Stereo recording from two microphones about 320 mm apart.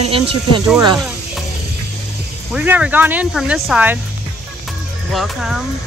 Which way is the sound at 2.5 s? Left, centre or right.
Centre.